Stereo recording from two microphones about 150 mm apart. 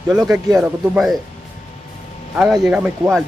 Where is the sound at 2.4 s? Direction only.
Centre (ahead or behind).